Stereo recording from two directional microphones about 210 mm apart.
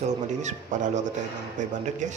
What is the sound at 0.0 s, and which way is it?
Speech, 35° right (ahead or behind).